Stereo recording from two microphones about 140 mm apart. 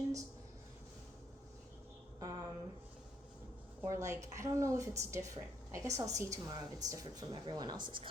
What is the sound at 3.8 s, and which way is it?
Speech, 20° right (ahead or behind).